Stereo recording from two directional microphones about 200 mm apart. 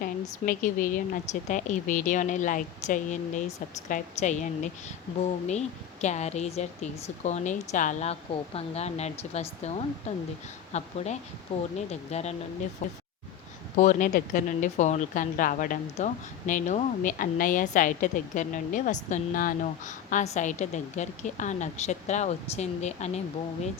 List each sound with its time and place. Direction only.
0.0 s a woman's voice: 45° left (ahead or behind)